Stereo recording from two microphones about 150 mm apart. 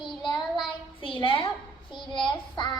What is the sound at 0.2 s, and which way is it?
Child singing, 30° left (ahead or behind).